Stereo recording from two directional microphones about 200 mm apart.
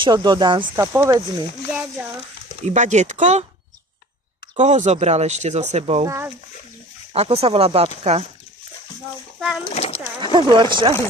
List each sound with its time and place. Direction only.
0.0 s speech: 20° right (ahead or behind)
2.6 s speech: 35° right (ahead or behind)
4.5 s speech: 35° right (ahead or behind)
6.1 s speech: 15° right (ahead or behind)
7.1 s speech: 30° right (ahead or behind)
9.6 s speech: 30° left (ahead or behind)
10.2 s speech: 25° right (ahead or behind)